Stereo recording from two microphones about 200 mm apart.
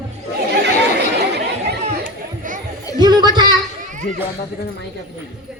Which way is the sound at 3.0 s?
20° right (ahead or behind).